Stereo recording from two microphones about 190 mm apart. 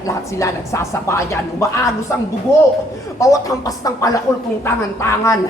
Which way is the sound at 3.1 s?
15° left (ahead or behind).